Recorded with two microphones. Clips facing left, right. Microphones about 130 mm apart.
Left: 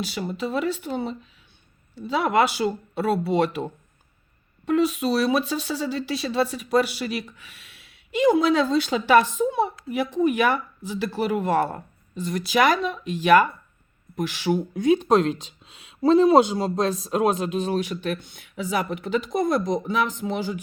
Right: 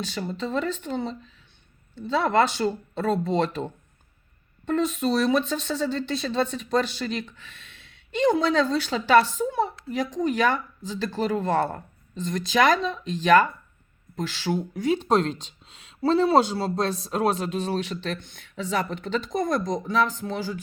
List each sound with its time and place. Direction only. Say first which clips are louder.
0.0 s speech: left 2 dB; 15° left (ahead or behind)
4.7 s speech: left 2 dB; 5° left (ahead or behind)